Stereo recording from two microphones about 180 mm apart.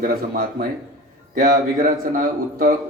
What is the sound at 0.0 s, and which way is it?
A man's voice, 55° right (ahead or behind).